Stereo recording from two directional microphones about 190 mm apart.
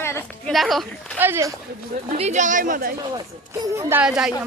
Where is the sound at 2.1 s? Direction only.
35° right (ahead or behind).